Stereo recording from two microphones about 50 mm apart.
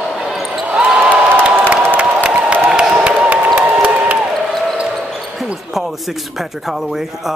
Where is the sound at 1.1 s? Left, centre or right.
Right.